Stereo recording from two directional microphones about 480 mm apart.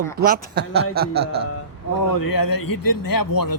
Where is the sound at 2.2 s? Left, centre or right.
Left.